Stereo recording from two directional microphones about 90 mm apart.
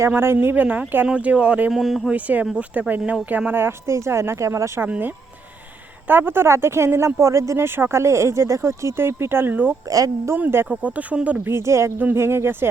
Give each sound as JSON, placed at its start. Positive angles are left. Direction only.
{"t": 0.1, "sound": "speech", "side_deg": -25}
{"t": 1.7, "sound": "speech", "side_deg": -5}
{"t": 2.1, "sound": "speech", "side_deg": -15}
{"t": 4.9, "sound": "speech", "side_deg": -20}
{"t": 9.9, "sound": "speech", "side_deg": -40}
{"t": 10.3, "sound": "speech", "side_deg": -25}
{"t": 11.4, "sound": "speech", "side_deg": -30}